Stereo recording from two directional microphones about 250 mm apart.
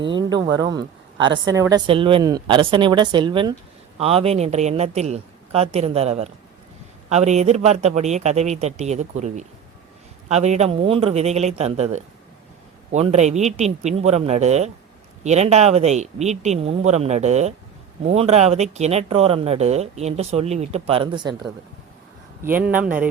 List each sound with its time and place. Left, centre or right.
0.0 s a woman's voice: centre
22.7 s a woman's voice: centre